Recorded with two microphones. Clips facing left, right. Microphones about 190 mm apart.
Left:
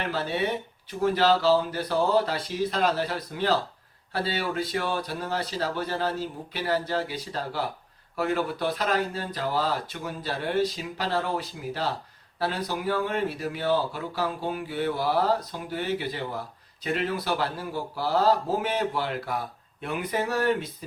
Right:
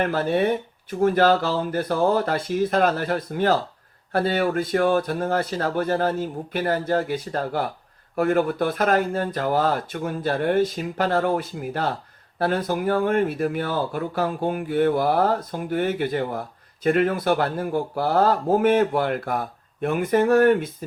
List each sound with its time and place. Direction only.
0.0 s speech: 50° right (ahead or behind)